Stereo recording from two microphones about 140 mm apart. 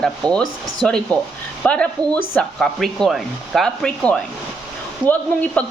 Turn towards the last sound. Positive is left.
turn(degrees=10)  # may be behind; listen again after turning